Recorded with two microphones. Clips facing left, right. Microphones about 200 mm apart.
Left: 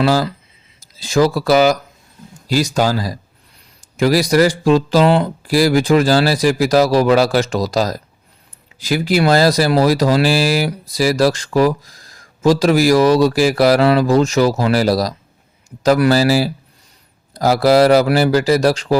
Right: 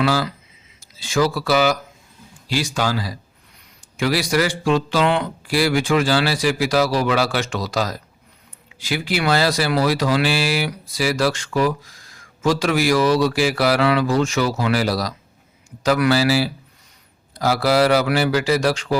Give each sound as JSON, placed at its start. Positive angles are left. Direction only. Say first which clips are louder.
{"t": 0.0, "sound": "speech", "louder": "left 5 dB", "side_deg": 40}